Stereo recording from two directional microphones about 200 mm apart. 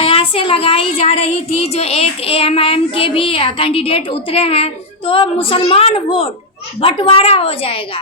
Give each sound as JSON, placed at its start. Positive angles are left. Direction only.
{"t": 0.0, "sound": "child singing", "side_deg": 30}